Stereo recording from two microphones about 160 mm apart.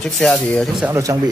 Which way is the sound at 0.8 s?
20° right (ahead or behind).